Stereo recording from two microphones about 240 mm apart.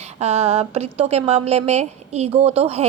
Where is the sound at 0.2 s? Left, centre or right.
Right.